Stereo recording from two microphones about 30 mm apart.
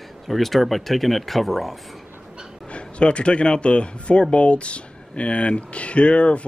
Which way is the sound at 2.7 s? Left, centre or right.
Left.